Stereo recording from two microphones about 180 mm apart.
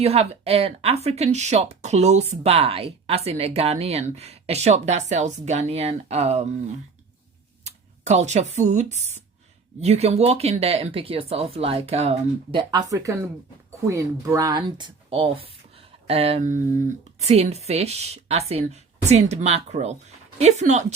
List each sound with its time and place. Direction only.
0.0 s speech: 35° right (ahead or behind)